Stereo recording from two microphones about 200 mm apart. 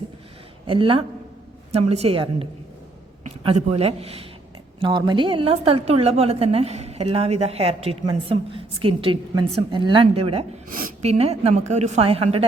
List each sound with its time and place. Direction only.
0.7 s a woman's voice: 25° right (ahead or behind)
10.7 s a woman's voice: 45° right (ahead or behind)